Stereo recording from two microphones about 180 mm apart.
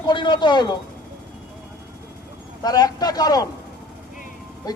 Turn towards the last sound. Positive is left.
turn(degrees=20)  # may be behind; listen again after turning